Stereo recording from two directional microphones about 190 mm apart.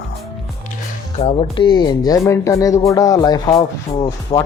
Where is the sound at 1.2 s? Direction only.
25° left (ahead or behind).